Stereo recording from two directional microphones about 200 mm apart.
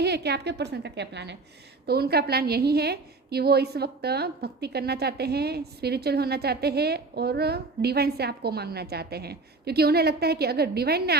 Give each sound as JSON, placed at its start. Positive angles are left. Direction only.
{"t": 0.0, "sound": "a woman's voice", "side_deg": -55}